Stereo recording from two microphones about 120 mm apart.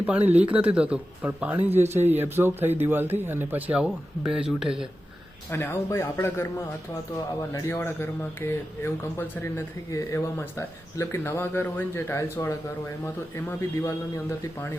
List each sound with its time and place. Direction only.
0.0 s speech: 10° right (ahead or behind)
5.5 s speech: 20° left (ahead or behind)
7.5 s speech: 20° left (ahead or behind)
13.8 s speech: 25° left (ahead or behind)